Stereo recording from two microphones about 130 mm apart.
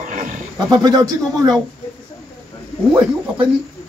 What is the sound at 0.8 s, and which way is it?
Speech, 30° right (ahead or behind).